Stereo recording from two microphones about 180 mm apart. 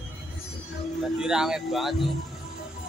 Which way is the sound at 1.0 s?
5° right (ahead or behind).